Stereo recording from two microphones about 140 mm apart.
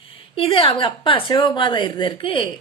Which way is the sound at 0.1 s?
40° left (ahead or behind).